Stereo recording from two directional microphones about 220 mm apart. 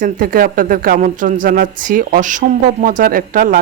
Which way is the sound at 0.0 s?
40° right (ahead or behind).